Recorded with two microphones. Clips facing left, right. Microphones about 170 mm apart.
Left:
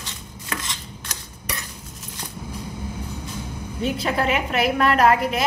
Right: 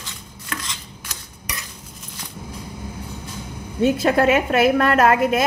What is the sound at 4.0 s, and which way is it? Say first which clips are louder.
A woman's voice: right 5 dB; 45° right (ahead or behind).